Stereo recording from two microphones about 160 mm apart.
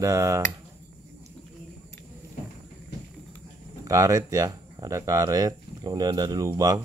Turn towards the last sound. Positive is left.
turn(degrees=-20)  # may be behind; listen again after turning